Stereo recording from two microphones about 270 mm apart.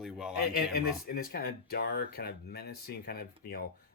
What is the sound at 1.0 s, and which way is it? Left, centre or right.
Speech, left.